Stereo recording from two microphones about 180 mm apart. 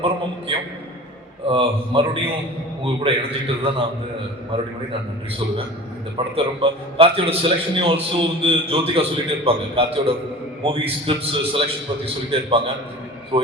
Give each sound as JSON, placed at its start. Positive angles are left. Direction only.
{"t": 1.5, "sound": "a man's voice", "side_deg": -30}
{"t": 6.1, "sound": "a man's voice", "side_deg": -30}